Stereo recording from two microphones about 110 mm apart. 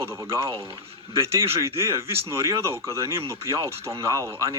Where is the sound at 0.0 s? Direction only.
25° right (ahead or behind).